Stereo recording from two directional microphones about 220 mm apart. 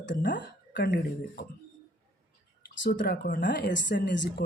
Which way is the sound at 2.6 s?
55° left (ahead or behind).